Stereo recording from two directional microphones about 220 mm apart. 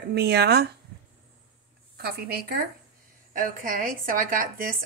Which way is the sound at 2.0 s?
45° right (ahead or behind).